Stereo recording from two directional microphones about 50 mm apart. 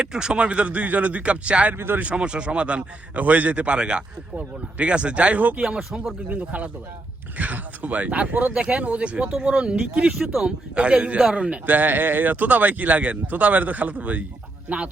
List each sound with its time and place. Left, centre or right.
0.0 s a man's voice: centre
1.7 s speech: right
2.0 s a man's voice: right
5.5 s a man's voice: centre
6.2 s speech: right
8.5 s a man's voice: right
10.1 s speech: centre
10.8 s a man's voice: right